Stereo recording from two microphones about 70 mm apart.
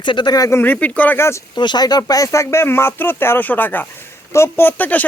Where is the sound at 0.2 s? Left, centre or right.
Left.